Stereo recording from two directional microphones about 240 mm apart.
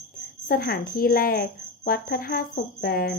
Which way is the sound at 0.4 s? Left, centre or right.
Left.